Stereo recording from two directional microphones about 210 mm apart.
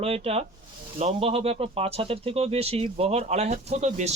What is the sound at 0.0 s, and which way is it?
Speech, 30° right (ahead or behind).